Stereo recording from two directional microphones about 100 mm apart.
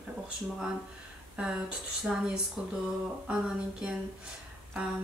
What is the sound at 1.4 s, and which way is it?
Speech, 10° right (ahead or behind).